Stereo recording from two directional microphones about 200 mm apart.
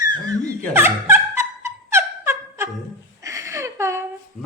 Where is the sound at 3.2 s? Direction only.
15° right (ahead or behind).